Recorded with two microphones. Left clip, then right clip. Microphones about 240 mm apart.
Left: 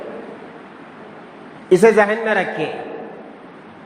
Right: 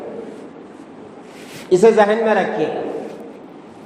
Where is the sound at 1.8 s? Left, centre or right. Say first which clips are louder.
Right 2 dB; left.